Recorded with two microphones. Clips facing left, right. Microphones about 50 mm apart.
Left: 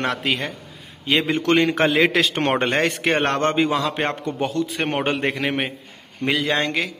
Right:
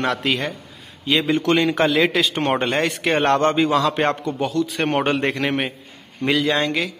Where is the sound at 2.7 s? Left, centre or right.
Left.